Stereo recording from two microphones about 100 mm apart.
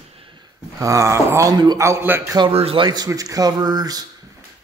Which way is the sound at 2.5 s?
70° right (ahead or behind).